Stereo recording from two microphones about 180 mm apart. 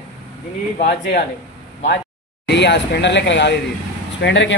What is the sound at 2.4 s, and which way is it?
A man's voice, 75° left (ahead or behind).